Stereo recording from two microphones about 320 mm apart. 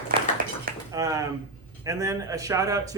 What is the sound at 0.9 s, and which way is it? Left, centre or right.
A man's voice, centre.